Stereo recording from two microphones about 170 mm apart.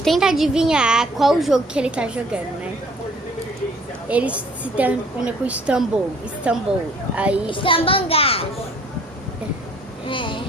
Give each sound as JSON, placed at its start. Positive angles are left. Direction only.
{"t": 0.0, "sound": "a woman's voice", "side_deg": 0}
{"t": 4.1, "sound": "a woman's voice", "side_deg": -10}
{"t": 7.5, "sound": "a child's voice", "side_deg": 30}
{"t": 10.1, "sound": "speech", "side_deg": 30}